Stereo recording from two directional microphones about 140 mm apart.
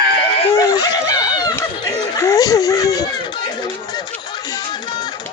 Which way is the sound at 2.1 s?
25° left (ahead or behind).